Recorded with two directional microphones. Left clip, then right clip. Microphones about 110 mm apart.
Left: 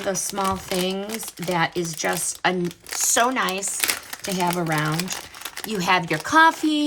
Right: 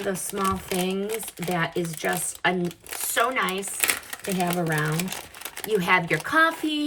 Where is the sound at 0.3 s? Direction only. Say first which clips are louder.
Left 2 dB; 15° left (ahead or behind).